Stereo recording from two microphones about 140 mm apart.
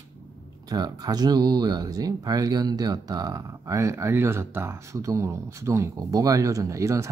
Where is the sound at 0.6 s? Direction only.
30° right (ahead or behind).